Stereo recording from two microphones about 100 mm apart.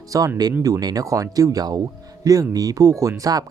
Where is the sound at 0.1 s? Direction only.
35° right (ahead or behind).